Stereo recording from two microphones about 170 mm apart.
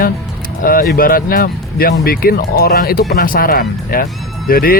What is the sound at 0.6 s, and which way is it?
Speech, 55° left (ahead or behind).